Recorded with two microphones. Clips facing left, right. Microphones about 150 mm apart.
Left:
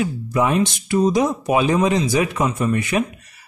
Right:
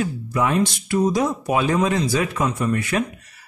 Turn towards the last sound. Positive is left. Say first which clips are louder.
# left 2 dB
turn(degrees=20)  # may be behind; listen again after turning